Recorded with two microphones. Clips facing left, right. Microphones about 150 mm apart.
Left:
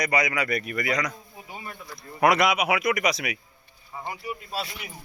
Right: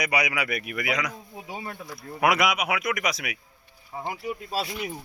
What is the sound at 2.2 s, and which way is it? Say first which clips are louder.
Speech: left 2 dB; centre (ahead or behind).